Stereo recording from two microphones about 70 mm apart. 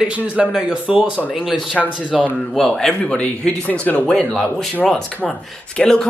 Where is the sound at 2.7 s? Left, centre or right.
Centre.